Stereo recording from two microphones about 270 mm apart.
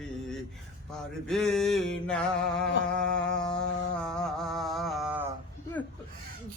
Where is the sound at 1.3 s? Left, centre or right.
Centre.